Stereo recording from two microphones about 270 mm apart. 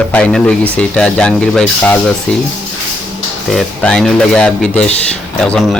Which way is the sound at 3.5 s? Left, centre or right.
Centre.